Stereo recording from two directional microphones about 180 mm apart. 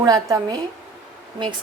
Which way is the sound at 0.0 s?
20° right (ahead or behind).